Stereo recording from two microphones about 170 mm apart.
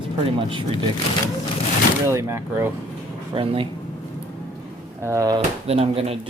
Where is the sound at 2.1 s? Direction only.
15° right (ahead or behind).